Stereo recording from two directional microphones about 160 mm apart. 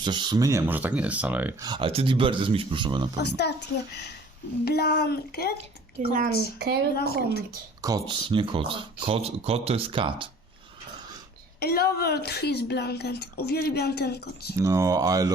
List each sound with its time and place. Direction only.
0.0 s speech: 30° right (ahead or behind); by 1.5 s 10° right (ahead or behind)
1.6 s speech: 25° right (ahead or behind)
3.2 s a woman's voice: 90° left
4.6 s speech: 80° left
6.0 s speech: 50° right (ahead or behind)
6.9 s speech: 75° left (ahead or behind)
7.8 s speech: 25° right (ahead or behind)
11.6 s a woman's voice: 75° left (ahead or behind); by 14.5 s 90° left
14.6 s speech: 20° right (ahead or behind)